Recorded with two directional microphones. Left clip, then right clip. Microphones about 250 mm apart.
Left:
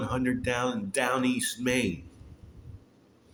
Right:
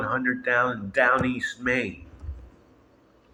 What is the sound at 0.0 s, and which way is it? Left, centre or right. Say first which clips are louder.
A man's voice: right 5 dB; left.